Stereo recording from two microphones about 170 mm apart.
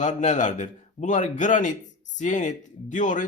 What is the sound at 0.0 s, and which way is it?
Speech, 45° left (ahead or behind).